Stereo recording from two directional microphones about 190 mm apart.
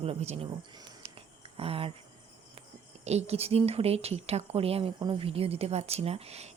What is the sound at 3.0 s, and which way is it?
Speech, 35° right (ahead or behind).